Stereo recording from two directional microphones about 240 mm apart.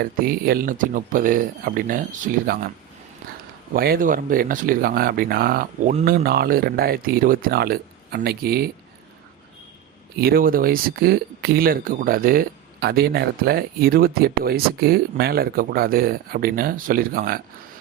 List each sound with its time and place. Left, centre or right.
0.0 s speech: right
3.8 s speech: right
10.2 s speech: right